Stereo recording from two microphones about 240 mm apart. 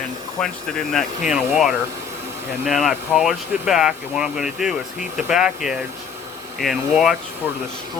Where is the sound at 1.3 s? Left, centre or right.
Centre.